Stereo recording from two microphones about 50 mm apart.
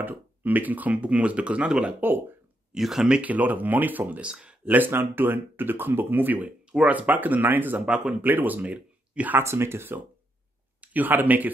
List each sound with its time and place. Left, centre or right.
0.0 s speech: right
2.0 s speech: right
2.7 s speech: centre
3.2 s speech: right
4.2 s speech: centre
4.6 s speech: right
7.8 s speech: centre
8.1 s speech: right
8.6 s speech: right
9.4 s speech: right
10.8 s speech: right